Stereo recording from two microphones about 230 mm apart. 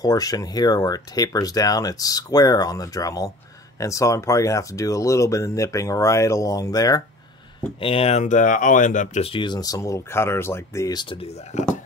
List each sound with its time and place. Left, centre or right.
0.0 s speech: centre
7.8 s speech: left